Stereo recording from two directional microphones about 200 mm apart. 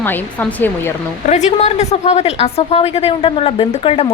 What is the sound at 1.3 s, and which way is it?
A woman's voice, 35° left (ahead or behind).